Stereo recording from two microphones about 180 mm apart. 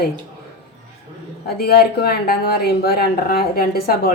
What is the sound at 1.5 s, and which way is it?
Speech, 60° left (ahead or behind).